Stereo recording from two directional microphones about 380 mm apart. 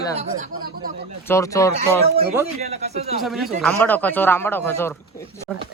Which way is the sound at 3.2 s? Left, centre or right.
Centre.